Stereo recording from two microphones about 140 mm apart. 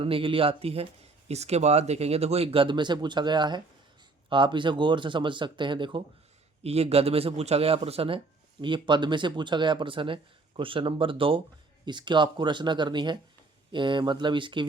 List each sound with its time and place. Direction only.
0.0 s speech: 40° right (ahead or behind)
6.6 s speech: 45° right (ahead or behind)